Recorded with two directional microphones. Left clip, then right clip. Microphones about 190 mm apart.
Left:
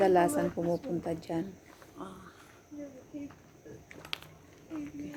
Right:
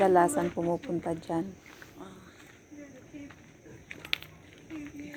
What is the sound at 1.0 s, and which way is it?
Speech, 5° right (ahead or behind).